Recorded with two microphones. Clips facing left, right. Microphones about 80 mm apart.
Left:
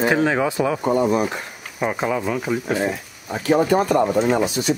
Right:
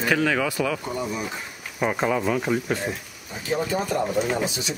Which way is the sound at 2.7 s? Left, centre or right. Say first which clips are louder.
Left 6 dB; left.